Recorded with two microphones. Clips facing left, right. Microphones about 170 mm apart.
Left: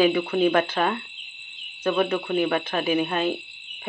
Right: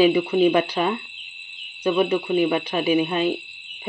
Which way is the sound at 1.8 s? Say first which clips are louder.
Right 3 dB; 15° right (ahead or behind).